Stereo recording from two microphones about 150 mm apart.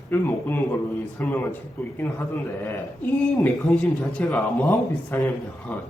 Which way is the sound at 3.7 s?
10° left (ahead or behind).